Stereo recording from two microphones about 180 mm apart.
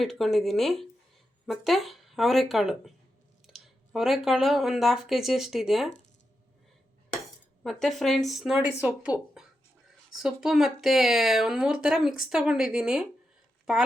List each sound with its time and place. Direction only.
0.0 s speech: centre (ahead or behind)
7.6 s speech: centre (ahead or behind)